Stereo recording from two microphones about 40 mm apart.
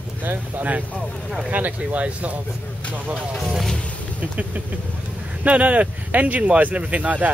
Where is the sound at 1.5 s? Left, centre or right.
Right.